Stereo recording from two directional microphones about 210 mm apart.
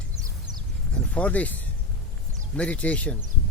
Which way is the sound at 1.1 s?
5° left (ahead or behind).